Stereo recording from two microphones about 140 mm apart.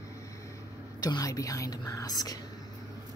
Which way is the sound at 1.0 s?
25° left (ahead or behind).